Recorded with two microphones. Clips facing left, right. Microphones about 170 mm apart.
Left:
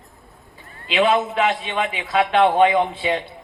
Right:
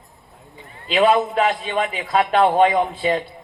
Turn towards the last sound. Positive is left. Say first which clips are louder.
# right 1 dB
turn(degrees=-40)  # may be behind; listen again after turning